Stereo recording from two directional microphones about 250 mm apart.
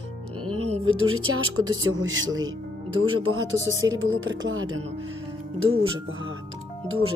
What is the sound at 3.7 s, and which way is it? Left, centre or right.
Speech, centre.